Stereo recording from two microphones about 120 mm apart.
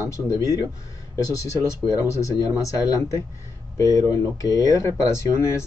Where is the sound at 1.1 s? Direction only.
30° left (ahead or behind).